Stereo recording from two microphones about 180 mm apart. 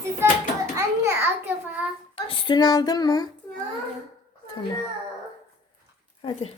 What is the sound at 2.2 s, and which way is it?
Child singing, 25° left (ahead or behind).